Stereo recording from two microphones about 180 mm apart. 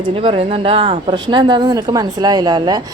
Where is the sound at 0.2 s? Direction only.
30° right (ahead or behind).